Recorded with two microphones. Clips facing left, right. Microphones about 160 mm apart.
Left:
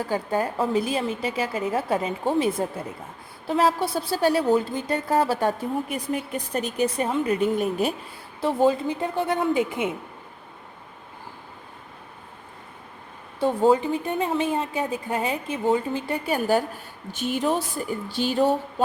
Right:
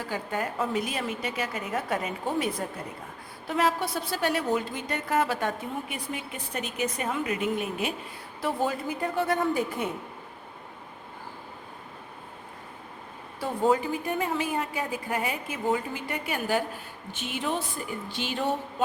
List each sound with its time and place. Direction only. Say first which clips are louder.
0.1 s a woman's voice: left 5 dB; 35° left (ahead or behind)
8.4 s a woman's voice: left 7 dB; 25° left (ahead or behind)
13.4 s a woman's voice: left 5 dB; 25° left (ahead or behind)